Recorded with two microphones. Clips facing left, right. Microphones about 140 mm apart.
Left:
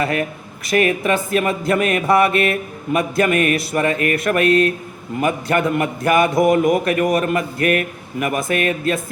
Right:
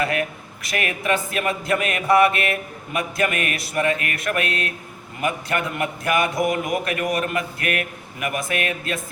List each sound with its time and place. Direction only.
0.0 s music: 30° left (ahead or behind)